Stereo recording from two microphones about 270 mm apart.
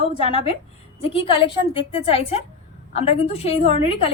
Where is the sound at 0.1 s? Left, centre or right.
Left.